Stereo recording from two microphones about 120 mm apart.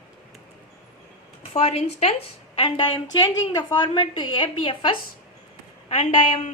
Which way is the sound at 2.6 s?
40° left (ahead or behind).